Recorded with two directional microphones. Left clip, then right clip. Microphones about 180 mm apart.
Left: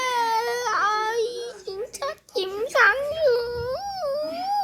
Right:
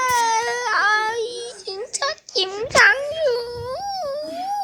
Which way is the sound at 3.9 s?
15° left (ahead or behind).